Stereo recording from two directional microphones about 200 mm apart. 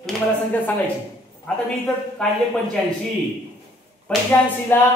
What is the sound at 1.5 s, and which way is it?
Speech, 5° left (ahead or behind).